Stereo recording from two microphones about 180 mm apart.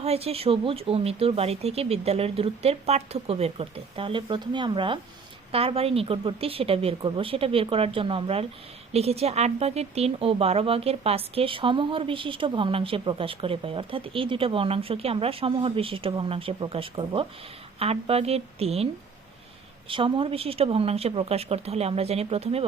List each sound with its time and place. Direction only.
0.0 s speech: 35° right (ahead or behind)
19.9 s speech: 30° right (ahead or behind)